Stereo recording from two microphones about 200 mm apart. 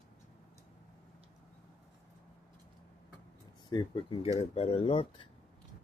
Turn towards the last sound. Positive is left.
turn(degrees=25)  # may be behind; listen again after turning